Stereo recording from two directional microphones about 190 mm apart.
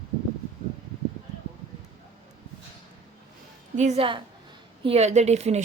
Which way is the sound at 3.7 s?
35° right (ahead or behind).